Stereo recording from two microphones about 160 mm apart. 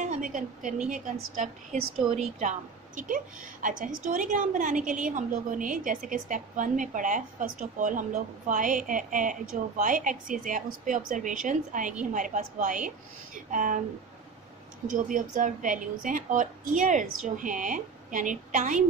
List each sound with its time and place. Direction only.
0.0 s a woman's voice: 50° right (ahead or behind)
3.6 s a woman's voice: 55° right (ahead or behind)
14.9 s a woman's voice: 55° right (ahead or behind)